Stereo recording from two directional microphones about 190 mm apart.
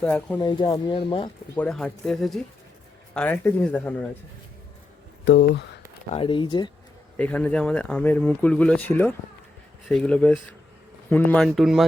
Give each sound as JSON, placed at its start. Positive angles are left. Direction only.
{"t": 0.0, "sound": "speech", "side_deg": 5}
{"t": 0.3, "sound": "speech", "side_deg": 25}
{"t": 1.5, "sound": "speech", "side_deg": 5}
{"t": 5.2, "sound": "speech", "side_deg": 65}
{"t": 6.1, "sound": "speech", "side_deg": 25}
{"t": 7.2, "sound": "speech", "side_deg": 10}